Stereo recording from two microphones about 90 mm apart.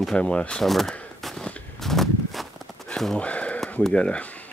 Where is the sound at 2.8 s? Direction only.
5° left (ahead or behind).